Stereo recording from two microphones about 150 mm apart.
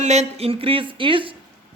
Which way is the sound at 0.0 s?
45° right (ahead or behind).